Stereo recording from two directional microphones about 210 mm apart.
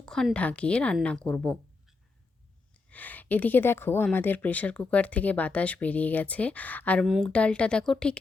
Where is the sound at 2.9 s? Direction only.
10° left (ahead or behind).